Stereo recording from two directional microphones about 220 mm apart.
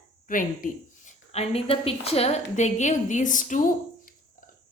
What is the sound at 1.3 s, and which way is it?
A woman's voice, 25° left (ahead or behind).